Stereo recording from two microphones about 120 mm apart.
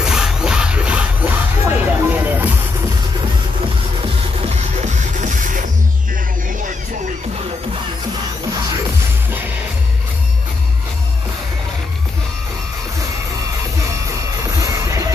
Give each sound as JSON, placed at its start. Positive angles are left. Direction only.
{"t": 0.0, "sound": "music", "side_deg": -5}
{"t": 4.4, "sound": "music", "side_deg": -70}
{"t": 14.6, "sound": "music", "side_deg": -25}